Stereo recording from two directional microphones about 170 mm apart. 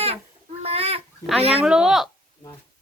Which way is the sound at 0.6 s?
35° right (ahead or behind).